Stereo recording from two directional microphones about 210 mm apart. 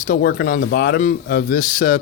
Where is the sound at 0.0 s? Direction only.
45° left (ahead or behind).